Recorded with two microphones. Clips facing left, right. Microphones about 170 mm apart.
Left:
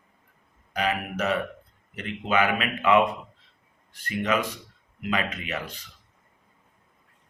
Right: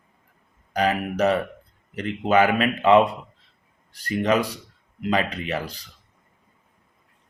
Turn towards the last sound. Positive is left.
turn(degrees=-35)  # may be behind; listen again after turning